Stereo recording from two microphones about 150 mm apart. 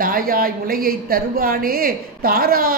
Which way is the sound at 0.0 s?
75° right (ahead or behind).